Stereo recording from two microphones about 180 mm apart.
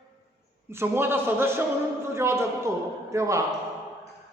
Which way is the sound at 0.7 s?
15° right (ahead or behind).